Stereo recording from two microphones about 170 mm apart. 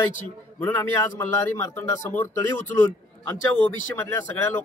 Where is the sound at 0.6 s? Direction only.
10° left (ahead or behind).